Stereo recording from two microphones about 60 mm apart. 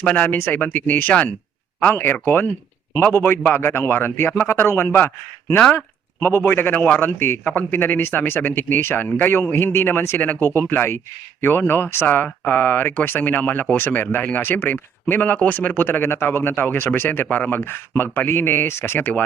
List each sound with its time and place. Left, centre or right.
0.0 s speech: left
18.9 s speech: left